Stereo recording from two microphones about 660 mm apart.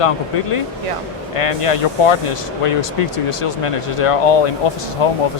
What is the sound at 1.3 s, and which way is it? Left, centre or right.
Speech, left.